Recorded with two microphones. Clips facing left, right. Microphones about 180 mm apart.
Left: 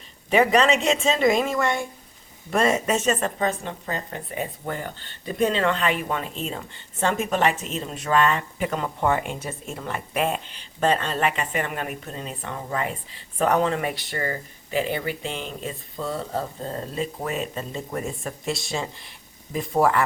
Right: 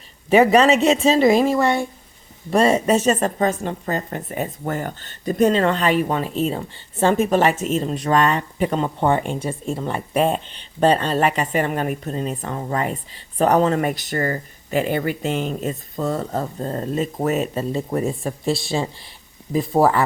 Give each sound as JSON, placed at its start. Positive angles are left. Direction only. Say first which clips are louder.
{"t": 0.3, "sound": "speech", "louder": "right 5 dB", "side_deg": -40}